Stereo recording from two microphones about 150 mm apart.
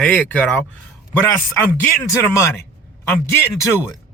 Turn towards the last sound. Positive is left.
turn(degrees=15)  # may be behind; listen again after turning